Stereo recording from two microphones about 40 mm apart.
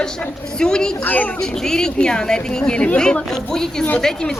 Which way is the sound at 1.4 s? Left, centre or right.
Centre.